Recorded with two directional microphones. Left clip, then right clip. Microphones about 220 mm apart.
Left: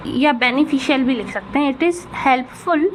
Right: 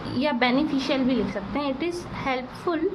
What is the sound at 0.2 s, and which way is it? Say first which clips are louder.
A woman's voice: left 7 dB; 25° left (ahead or behind).